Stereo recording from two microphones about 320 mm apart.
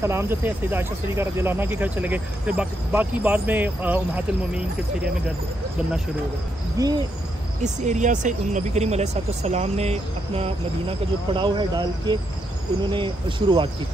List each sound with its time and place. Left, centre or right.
0.0 s speech: centre
6.8 s speech: centre
7.6 s speech: right